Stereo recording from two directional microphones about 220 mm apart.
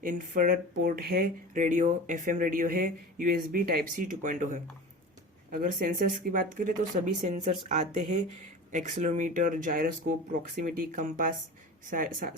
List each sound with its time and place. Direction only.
0.0 s speech: 40° right (ahead or behind)